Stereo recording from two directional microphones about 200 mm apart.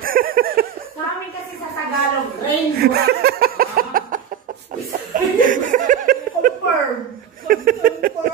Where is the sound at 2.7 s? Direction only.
50° right (ahead or behind).